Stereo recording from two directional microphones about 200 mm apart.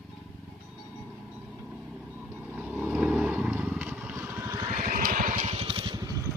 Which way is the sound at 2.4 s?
5° right (ahead or behind).